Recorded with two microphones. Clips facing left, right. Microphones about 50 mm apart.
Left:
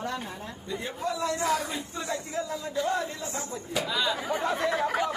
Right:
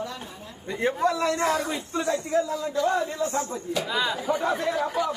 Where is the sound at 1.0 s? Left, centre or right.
Right.